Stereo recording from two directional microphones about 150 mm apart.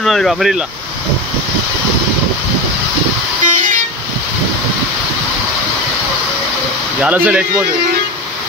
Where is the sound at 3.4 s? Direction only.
60° right (ahead or behind).